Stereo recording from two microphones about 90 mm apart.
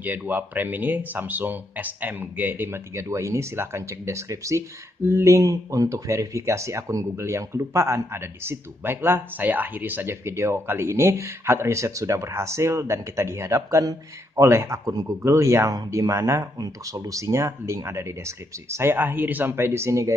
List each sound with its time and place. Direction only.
0.0 s speech: 20° right (ahead or behind)
13.6 s speech: 40° right (ahead or behind)
14.9 s speech: 40° right (ahead or behind)